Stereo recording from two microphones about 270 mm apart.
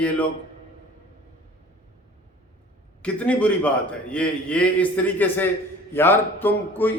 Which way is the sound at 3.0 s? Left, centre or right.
Centre.